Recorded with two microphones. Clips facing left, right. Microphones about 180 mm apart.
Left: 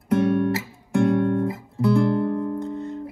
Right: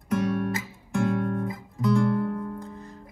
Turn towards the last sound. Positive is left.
turn(degrees=25)  # may be behind; listen again after turning